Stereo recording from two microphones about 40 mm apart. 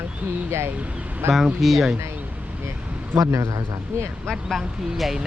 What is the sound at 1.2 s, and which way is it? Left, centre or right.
Speech, right.